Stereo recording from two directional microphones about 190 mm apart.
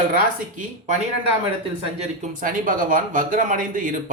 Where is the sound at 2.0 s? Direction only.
45° right (ahead or behind).